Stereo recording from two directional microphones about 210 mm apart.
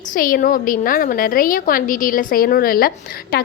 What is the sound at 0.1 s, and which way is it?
A woman's voice, 40° left (ahead or behind).